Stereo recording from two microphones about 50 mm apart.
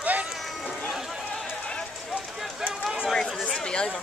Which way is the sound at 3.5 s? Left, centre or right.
Centre.